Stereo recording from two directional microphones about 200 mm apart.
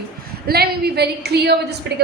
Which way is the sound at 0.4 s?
50° right (ahead or behind).